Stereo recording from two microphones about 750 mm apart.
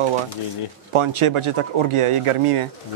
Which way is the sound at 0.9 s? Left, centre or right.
Right.